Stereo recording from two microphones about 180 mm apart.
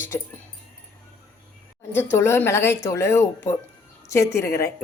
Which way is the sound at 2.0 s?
15° left (ahead or behind).